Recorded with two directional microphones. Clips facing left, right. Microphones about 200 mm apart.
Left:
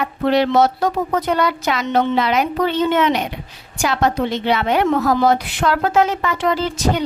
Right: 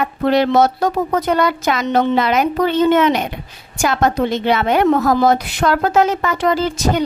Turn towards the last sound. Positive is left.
turn(degrees=-45)  # may be behind; listen again after turning